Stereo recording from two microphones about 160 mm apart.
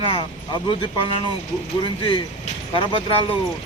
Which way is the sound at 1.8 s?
35° left (ahead or behind).